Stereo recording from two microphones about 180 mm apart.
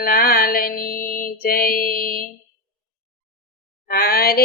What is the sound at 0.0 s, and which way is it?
Music, 55° left (ahead or behind).